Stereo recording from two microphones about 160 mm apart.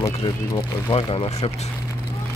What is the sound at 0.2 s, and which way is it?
Speech, 35° left (ahead or behind).